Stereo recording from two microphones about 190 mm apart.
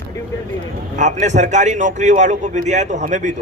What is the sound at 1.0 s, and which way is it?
A man's voice, 40° right (ahead or behind).